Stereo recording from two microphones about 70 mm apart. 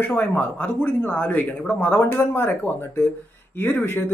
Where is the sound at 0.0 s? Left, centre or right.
Left.